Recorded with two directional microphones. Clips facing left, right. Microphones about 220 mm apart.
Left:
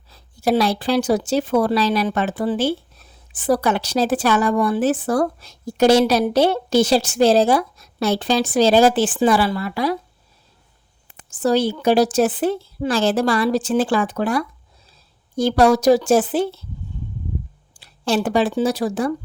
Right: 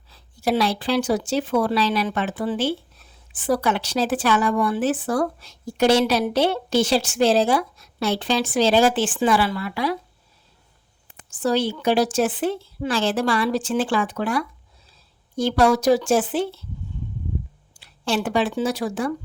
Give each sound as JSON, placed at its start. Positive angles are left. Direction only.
{"t": 0.1, "sound": "speech", "side_deg": 40}
{"t": 11.3, "sound": "speech", "side_deg": 40}
{"t": 17.7, "sound": "speech", "side_deg": 40}